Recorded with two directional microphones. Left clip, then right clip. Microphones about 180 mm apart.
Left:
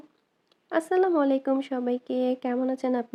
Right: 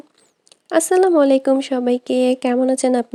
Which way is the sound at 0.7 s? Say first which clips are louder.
Right 9 dB; 40° right (ahead or behind).